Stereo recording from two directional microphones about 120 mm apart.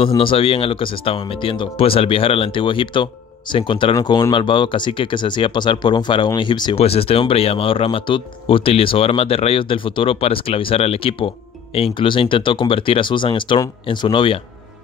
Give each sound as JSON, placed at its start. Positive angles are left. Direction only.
{"t": 0.2, "sound": "speech", "side_deg": 50}
{"t": 6.8, "sound": "speech", "side_deg": 55}